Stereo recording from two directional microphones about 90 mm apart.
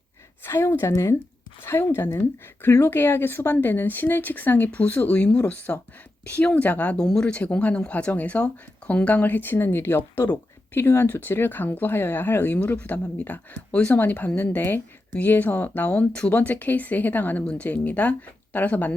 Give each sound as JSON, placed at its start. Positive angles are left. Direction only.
{"t": 0.4, "sound": "speech", "side_deg": 25}